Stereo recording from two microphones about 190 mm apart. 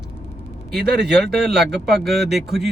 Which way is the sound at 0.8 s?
60° right (ahead or behind).